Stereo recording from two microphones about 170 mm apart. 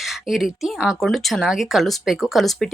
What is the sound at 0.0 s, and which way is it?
Speech, centre (ahead or behind).